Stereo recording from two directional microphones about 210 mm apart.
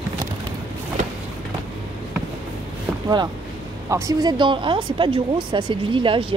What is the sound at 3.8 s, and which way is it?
Speech, 15° right (ahead or behind).